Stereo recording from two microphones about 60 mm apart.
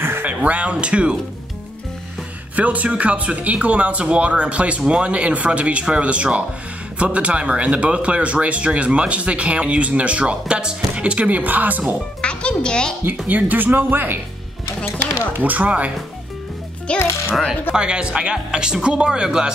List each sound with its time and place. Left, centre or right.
0.0 s a sound: right
0.3 s speech: right
2.5 s speech: right
12.2 s music: centre
13.3 s speech: right
15.3 s speech: right
16.9 s a child's voice: centre
17.7 s speech: centre